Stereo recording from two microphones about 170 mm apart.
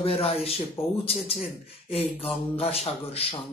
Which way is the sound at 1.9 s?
35° left (ahead or behind).